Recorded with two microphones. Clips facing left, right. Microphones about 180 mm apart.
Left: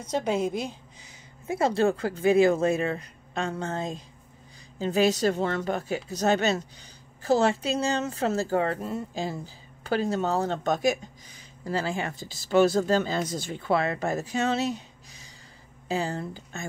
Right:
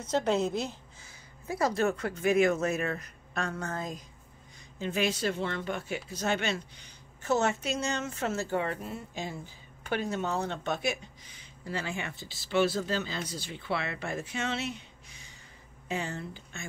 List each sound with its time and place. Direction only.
0.1 s a woman's voice: 10° left (ahead or behind)
1.5 s speech: 30° left (ahead or behind)